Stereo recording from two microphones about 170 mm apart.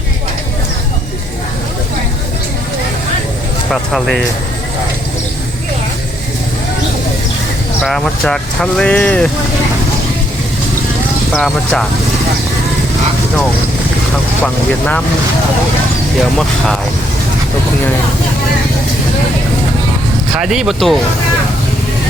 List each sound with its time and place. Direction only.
3.7 s speech: centre (ahead or behind)
7.9 s speech: centre (ahead or behind)
11.3 s speech: centre (ahead or behind)
14.4 s speech: 5° left (ahead or behind)
20.3 s speech: centre (ahead or behind)